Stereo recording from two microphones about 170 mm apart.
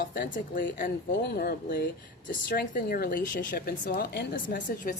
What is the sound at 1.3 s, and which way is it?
Speech, 60° left (ahead or behind).